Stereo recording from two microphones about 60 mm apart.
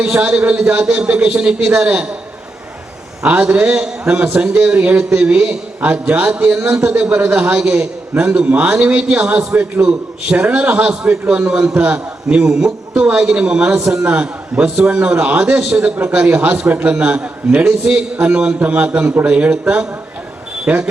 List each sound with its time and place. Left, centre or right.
0.0 s a man's voice: right
3.2 s a man's voice: right